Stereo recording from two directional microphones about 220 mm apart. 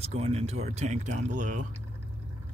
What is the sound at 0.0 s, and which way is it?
Speech, 30° right (ahead or behind).